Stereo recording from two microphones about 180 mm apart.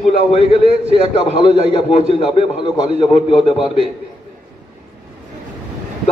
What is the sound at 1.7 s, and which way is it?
Speech, 35° left (ahead or behind).